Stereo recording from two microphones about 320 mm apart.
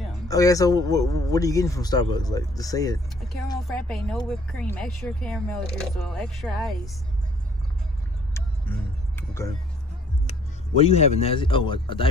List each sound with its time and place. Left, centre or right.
0.3 s a man's voice: centre
8.3 s vehicle: centre
10.8 s a man's voice: centre